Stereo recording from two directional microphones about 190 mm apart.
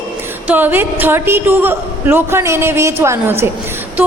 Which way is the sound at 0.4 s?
10° right (ahead or behind).